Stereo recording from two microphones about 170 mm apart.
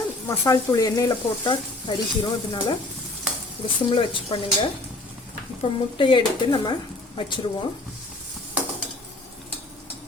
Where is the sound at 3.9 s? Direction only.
30° left (ahead or behind).